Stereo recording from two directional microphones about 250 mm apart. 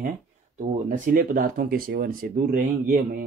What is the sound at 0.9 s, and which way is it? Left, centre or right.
Speech, right.